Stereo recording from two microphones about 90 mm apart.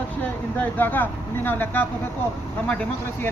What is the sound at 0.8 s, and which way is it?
Speech, 20° left (ahead or behind).